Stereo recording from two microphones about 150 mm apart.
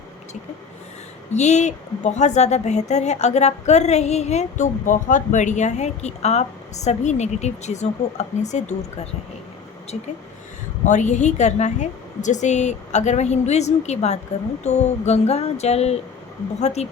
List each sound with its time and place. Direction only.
1.3 s a woman's voice: 50° left (ahead or behind)
10.8 s a woman's voice: 55° left (ahead or behind)